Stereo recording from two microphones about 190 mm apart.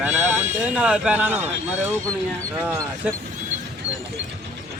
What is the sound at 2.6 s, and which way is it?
Speech, 10° right (ahead or behind).